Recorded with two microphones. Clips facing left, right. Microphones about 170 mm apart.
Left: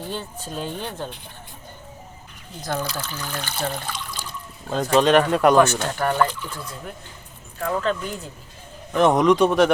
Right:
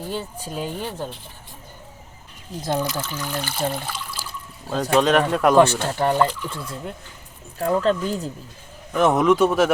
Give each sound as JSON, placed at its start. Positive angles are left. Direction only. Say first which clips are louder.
{"t": 0.0, "sound": "speech", "louder": "right 2 dB", "side_deg": -10}
{"t": 2.6, "sound": "speech", "louder": "right 3 dB", "side_deg": -20}
{"t": 3.2, "sound": "a man's voice", "louder": "right 2 dB", "side_deg": -10}
{"t": 6.0, "sound": "speech", "louder": "right 2 dB", "side_deg": -25}
{"t": 9.0, "sound": "a man's voice", "louder": "left 1 dB", "side_deg": -5}